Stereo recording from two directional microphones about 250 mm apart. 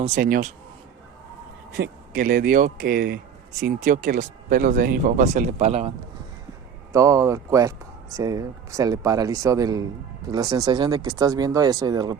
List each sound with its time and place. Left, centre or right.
0.0 s speech: right
1.7 s speech: right
6.9 s speech: centre